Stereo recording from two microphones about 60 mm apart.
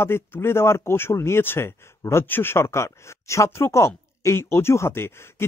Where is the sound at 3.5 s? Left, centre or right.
Left.